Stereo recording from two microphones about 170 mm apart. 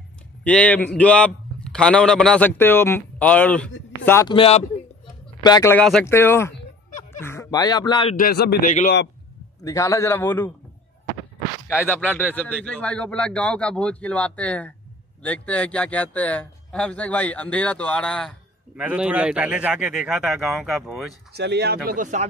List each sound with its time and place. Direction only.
0.4 s a man's voice: 5° left (ahead or behind)
4.3 s speech: 35° left (ahead or behind)
5.4 s speech: 25° left (ahead or behind)
5.7 s a man's voice: 5° left (ahead or behind); by 8.2 s 30° left (ahead or behind)
8.2 s a man's voice: 70° left (ahead or behind)
8.6 s a man's voice: 50° left (ahead or behind)
9.6 s a man's voice: 20° left (ahead or behind)
11.7 s a man's voice: 10° left (ahead or behind)
18.8 s a man's voice: 10° right (ahead or behind)
21.3 s speech: 75° right (ahead or behind)
21.9 s speech: 45° right (ahead or behind)